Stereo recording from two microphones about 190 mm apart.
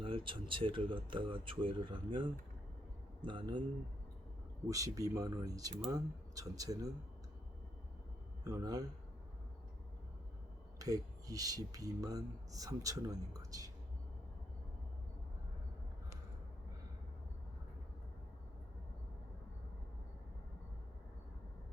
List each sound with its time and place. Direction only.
0.0 s a man's voice: 25° right (ahead or behind)
4.7 s speech: 20° right (ahead or behind)
8.4 s speech: 20° right (ahead or behind)
10.8 s speech: 20° right (ahead or behind)